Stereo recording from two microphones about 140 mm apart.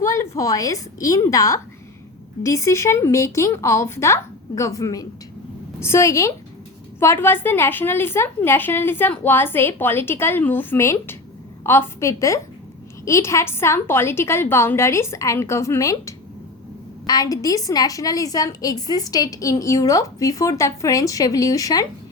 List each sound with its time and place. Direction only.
0.0 s a woman's voice: 20° left (ahead or behind)